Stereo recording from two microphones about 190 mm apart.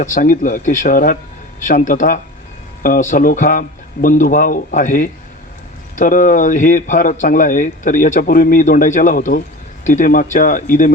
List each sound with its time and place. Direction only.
0.0 s a man's voice: 45° left (ahead or behind)